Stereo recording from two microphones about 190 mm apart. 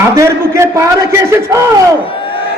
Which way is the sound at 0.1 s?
15° right (ahead or behind).